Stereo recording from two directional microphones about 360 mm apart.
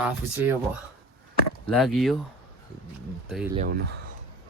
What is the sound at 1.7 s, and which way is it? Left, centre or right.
Speech, centre.